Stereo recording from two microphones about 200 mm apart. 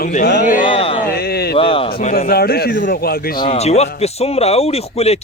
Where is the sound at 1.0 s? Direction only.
50° left (ahead or behind).